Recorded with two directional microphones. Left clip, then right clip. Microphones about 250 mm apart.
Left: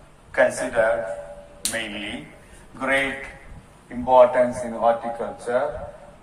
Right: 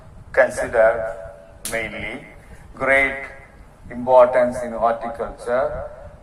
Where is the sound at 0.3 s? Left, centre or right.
Right.